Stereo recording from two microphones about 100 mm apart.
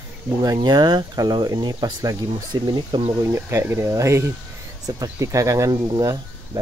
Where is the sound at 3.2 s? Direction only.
25° right (ahead or behind).